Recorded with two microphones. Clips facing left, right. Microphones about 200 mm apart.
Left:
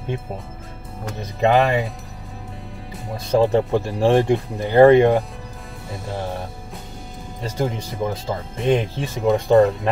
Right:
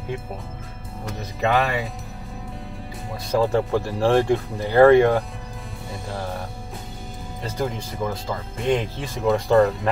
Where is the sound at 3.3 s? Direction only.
20° left (ahead or behind).